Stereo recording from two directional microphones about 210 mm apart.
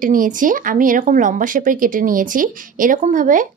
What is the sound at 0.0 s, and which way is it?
A woman's voice, 40° right (ahead or behind).